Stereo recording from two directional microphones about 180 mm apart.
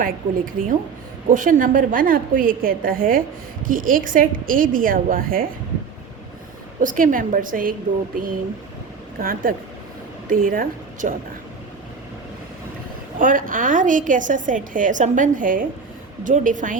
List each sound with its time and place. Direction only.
0.0 s a woman's voice: 50° right (ahead or behind)
6.7 s a woman's voice: 50° right (ahead or behind)
9.1 s a woman's voice: 50° right (ahead or behind)
13.1 s a woman's voice: 50° right (ahead or behind)